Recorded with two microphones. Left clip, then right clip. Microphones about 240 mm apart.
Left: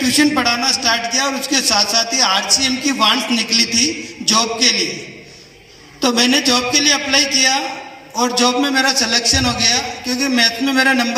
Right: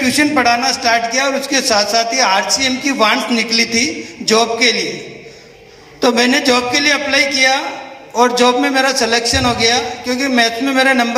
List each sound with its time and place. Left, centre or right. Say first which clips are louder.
0.0 s a man's voice: right 2 dB; centre
6.0 s a man's voice: right 2 dB; centre